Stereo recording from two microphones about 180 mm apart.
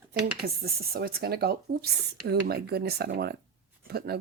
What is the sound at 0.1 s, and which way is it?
Speech, 60° right (ahead or behind).